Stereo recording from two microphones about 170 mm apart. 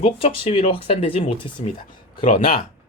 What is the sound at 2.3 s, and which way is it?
Speech, 55° left (ahead or behind).